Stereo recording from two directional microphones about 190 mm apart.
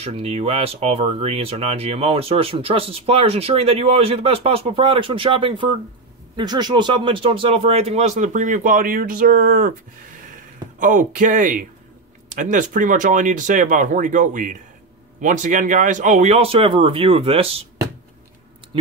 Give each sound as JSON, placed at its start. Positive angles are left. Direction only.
{"t": 0.0, "sound": "speech", "side_deg": -30}
{"t": 10.8, "sound": "speech", "side_deg": -45}